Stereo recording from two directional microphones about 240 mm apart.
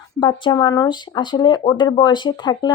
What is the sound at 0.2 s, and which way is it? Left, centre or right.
Speech, centre.